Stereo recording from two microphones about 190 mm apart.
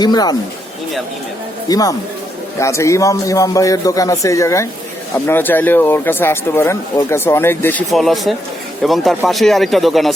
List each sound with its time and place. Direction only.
0.0 s speech: 20° left (ahead or behind)
1.6 s speech: 20° left (ahead or behind); by 10.1 s centre (ahead or behind)